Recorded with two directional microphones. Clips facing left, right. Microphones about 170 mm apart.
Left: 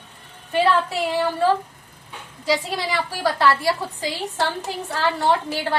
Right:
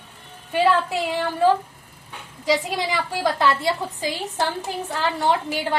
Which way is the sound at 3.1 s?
20° right (ahead or behind).